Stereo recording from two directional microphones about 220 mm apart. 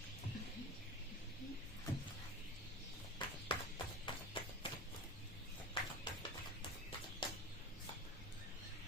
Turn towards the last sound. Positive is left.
turn(degrees=20)  # may be behind; listen again after turning